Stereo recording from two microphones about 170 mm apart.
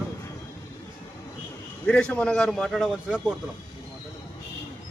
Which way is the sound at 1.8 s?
5° left (ahead or behind).